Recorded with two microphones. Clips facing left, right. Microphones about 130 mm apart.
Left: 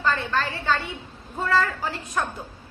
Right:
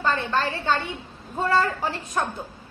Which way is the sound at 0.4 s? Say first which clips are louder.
Right 1 dB; 25° right (ahead or behind).